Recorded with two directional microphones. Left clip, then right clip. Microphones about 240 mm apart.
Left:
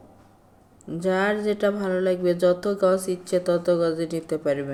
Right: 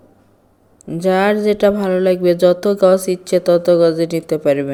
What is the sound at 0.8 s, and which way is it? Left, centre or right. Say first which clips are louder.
Speech: right 9 dB; right.